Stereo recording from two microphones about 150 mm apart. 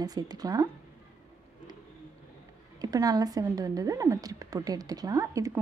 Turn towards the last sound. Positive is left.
turn(degrees=-20)  # may be behind; listen again after turning